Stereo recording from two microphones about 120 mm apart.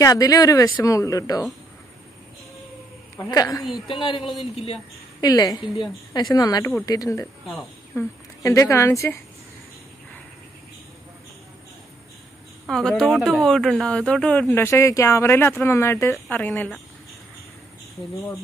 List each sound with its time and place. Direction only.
0.0 s speech: 30° left (ahead or behind)
3.3 s speech: 30° left (ahead or behind)
3.6 s a man's voice: centre (ahead or behind)
3.9 s speech: 45° left (ahead or behind)
4.2 s a man's voice: centre (ahead or behind)
5.2 s speech: 30° left (ahead or behind)
12.6 s speech: 5° left (ahead or behind)
18.1 s speech: 25° left (ahead or behind)